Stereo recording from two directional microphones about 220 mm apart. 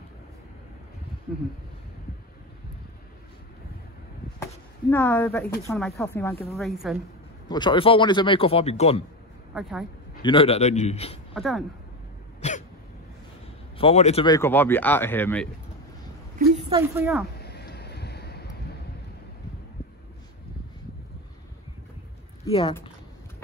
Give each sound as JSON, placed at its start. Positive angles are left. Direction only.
{"t": 4.9, "sound": "a woman's voice", "side_deg": 10}
{"t": 7.4, "sound": "a man's voice", "side_deg": 20}
{"t": 9.5, "sound": "a woman's voice", "side_deg": -5}
{"t": 10.2, "sound": "a man's voice", "side_deg": 25}
{"t": 11.3, "sound": "a woman's voice", "side_deg": 0}
{"t": 12.4, "sound": "cough", "side_deg": 30}
{"t": 13.7, "sound": "a man's voice", "side_deg": 30}
{"t": 14.2, "sound": "speech", "side_deg": 15}
{"t": 16.6, "sound": "speech", "side_deg": -15}
{"t": 17.4, "sound": "vehicle", "side_deg": 50}
{"t": 22.5, "sound": "a man's voice", "side_deg": 25}